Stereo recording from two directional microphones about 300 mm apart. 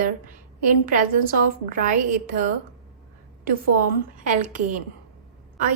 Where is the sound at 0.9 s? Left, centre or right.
Right.